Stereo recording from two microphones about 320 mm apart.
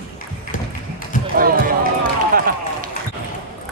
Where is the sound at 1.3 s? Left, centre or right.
Right.